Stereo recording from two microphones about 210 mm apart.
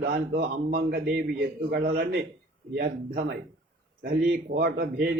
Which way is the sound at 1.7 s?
45° right (ahead or behind).